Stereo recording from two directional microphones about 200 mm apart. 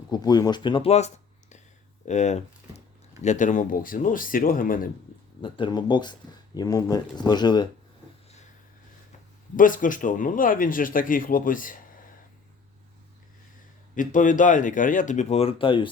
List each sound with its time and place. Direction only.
0.1 s speech: 20° left (ahead or behind); by 4.9 s 45° left (ahead or behind)
5.4 s speech: 25° left (ahead or behind)
9.6 s a man's voice: 40° left (ahead or behind)
13.9 s speech: 40° left (ahead or behind); by 15.9 s 25° left (ahead or behind)